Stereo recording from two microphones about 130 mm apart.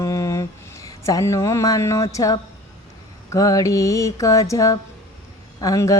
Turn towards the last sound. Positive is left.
turn(degrees=25)  # may be behind; listen again after turning